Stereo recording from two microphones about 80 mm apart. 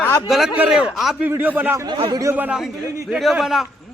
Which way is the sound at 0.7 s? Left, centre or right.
Centre.